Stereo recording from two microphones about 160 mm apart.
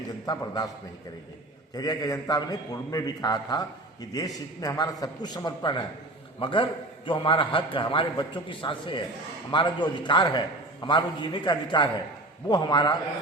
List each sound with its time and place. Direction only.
0.3 s a man's voice: 25° left (ahead or behind)
1.7 s a man's voice: 25° left (ahead or behind)